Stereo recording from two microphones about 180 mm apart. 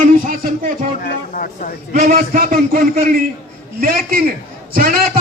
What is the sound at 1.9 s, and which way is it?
A man's voice, 50° right (ahead or behind).